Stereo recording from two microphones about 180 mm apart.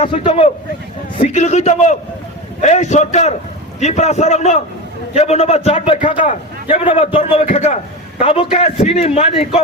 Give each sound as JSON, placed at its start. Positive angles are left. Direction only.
{"t": 0.0, "sound": "a man's voice", "side_deg": 35}